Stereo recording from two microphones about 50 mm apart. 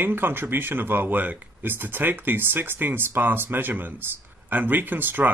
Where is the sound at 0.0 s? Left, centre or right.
Right.